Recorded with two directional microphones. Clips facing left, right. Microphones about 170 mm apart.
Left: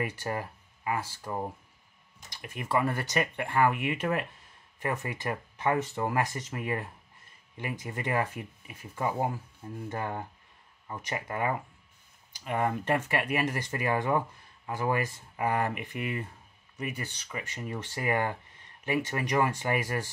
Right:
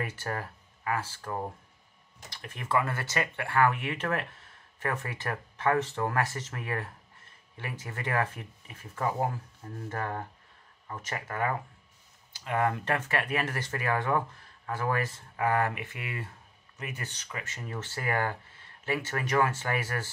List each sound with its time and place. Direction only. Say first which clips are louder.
0.0 s speech: left 2 dB; 15° left (ahead or behind)